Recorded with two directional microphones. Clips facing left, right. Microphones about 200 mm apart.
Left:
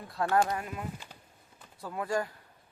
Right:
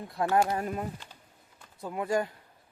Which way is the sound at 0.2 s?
15° right (ahead or behind).